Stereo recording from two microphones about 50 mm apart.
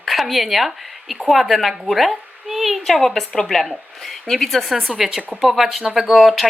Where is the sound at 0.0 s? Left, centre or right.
Centre.